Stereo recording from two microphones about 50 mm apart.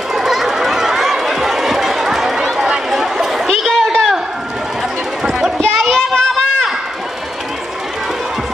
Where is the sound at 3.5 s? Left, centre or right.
Centre.